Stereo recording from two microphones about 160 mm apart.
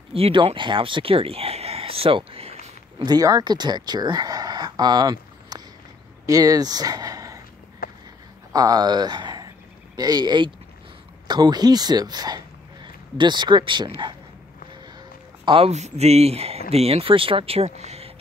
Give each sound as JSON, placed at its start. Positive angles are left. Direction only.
{"t": 0.1, "sound": "speech", "side_deg": -35}
{"t": 3.1, "sound": "speech", "side_deg": -25}
{"t": 7.8, "sound": "a sound", "side_deg": 65}
{"t": 8.5, "sound": "speech", "side_deg": -25}
{"t": 15.4, "sound": "speech", "side_deg": -35}